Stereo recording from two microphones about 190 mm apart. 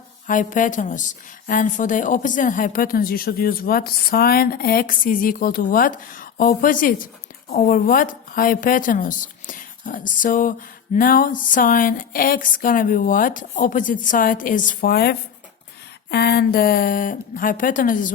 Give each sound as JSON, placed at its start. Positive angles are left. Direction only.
{"t": 0.3, "sound": "a woman's voice", "side_deg": 45}